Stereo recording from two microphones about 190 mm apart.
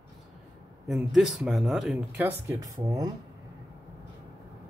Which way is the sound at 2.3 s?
15° right (ahead or behind).